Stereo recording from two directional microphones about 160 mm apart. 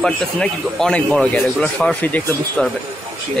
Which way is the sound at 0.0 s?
5° left (ahead or behind).